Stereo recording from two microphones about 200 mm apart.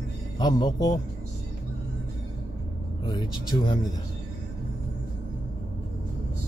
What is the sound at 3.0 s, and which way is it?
Speech, 20° left (ahead or behind).